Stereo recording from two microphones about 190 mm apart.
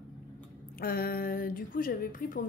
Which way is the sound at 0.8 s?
50° left (ahead or behind).